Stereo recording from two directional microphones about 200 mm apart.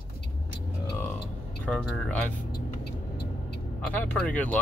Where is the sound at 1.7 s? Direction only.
5° left (ahead or behind).